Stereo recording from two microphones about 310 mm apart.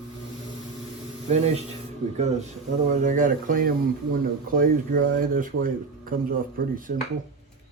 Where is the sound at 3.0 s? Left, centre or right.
Right.